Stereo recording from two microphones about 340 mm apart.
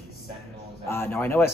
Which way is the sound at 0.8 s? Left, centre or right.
Centre.